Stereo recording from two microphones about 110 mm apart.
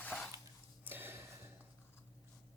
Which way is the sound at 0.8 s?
20° right (ahead or behind).